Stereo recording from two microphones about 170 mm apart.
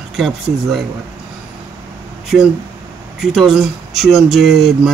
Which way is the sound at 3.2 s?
Centre (ahead or behind).